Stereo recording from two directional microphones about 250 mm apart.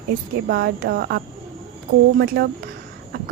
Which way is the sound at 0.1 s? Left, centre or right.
Right.